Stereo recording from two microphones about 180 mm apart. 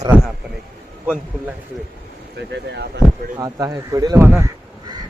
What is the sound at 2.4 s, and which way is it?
Speech, 70° right (ahead or behind).